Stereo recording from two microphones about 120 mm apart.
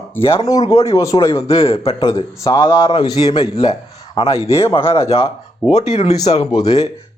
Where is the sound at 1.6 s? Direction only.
50° left (ahead or behind).